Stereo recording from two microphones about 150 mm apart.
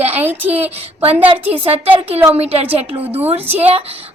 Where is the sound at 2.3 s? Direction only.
45° right (ahead or behind).